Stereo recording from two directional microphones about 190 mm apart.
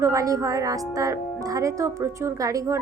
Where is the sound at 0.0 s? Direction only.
15° right (ahead or behind).